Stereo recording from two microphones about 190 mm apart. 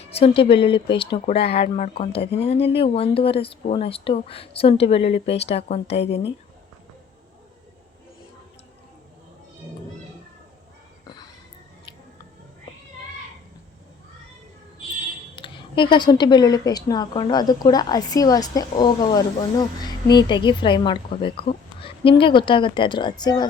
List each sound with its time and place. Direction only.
0.0 s speech: 30° left (ahead or behind)
15.4 s a woman's voice: 25° left (ahead or behind)